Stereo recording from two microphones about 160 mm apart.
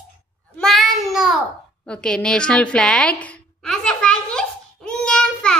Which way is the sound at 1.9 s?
5° left (ahead or behind).